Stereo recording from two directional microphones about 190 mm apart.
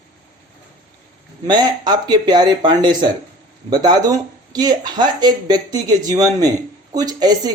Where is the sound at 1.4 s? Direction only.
20° right (ahead or behind).